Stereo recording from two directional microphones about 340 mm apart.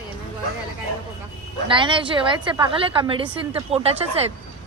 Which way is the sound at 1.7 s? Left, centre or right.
Centre.